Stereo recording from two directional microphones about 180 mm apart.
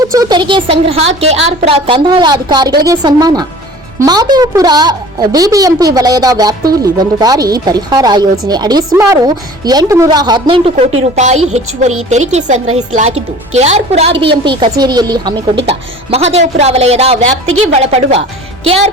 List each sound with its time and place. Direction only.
0.2 s a woman's voice: 25° right (ahead or behind)